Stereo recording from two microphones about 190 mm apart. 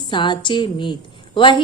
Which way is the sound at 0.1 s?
25° left (ahead or behind).